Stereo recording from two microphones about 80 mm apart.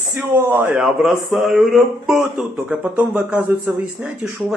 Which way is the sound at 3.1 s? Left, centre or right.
Centre.